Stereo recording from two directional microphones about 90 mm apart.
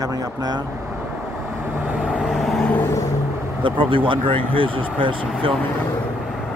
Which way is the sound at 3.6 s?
70° right (ahead or behind).